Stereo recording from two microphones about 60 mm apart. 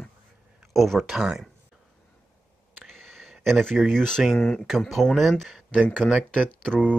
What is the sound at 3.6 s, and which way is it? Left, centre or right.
Speech, centre.